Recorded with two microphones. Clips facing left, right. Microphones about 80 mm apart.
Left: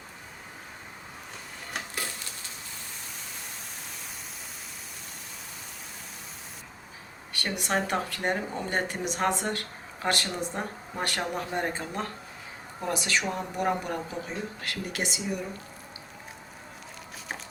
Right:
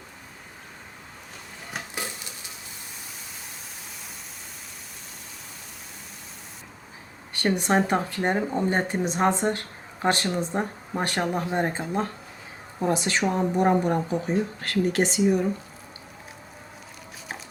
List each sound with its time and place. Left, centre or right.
7.3 s speech: right